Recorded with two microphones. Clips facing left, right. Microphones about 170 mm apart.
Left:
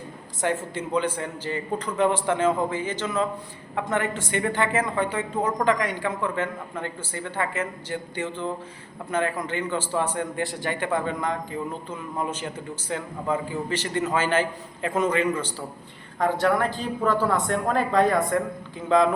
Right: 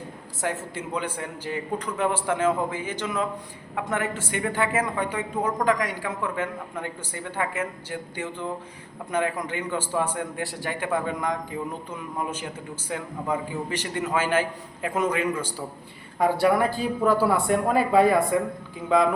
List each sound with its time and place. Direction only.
0.4 s a woman's voice: 5° right (ahead or behind)